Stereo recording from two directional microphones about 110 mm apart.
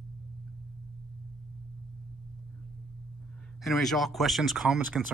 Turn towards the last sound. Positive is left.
turn(degrees=0)  # may be behind; listen again after turning